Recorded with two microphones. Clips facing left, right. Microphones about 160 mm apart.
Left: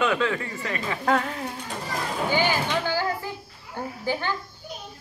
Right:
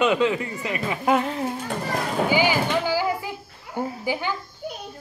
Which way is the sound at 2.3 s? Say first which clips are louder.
Right 2 dB; 10° right (ahead or behind).